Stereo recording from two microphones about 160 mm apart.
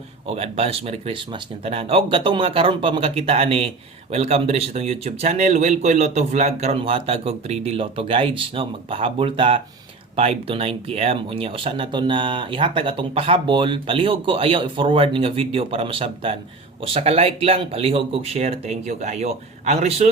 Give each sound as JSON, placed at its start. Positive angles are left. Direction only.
{"t": 0.3, "sound": "speech", "side_deg": -40}